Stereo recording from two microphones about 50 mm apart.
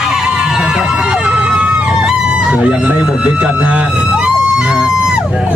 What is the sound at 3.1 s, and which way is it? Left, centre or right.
Music, centre.